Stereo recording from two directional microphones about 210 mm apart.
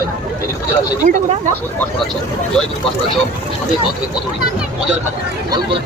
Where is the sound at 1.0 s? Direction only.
35° right (ahead or behind).